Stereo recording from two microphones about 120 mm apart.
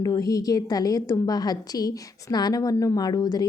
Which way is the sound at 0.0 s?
30° left (ahead or behind).